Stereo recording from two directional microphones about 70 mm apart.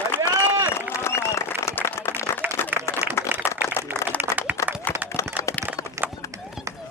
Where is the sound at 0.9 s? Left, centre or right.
Left.